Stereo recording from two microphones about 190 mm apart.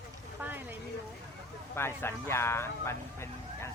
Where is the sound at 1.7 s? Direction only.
15° left (ahead or behind).